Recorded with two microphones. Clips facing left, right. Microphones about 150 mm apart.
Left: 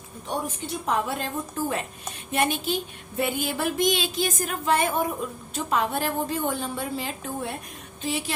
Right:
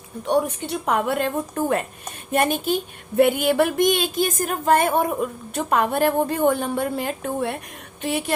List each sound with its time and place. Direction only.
0.3 s speech: 70° right (ahead or behind)